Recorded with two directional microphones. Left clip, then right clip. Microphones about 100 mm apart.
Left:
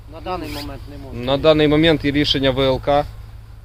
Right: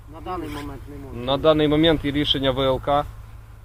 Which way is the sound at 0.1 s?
45° left (ahead or behind).